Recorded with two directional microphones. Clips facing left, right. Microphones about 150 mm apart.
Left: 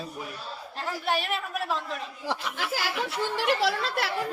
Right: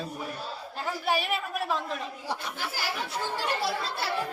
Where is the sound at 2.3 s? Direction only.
90° left.